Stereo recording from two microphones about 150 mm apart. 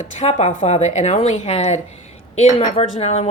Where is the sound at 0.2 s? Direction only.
45° left (ahead or behind).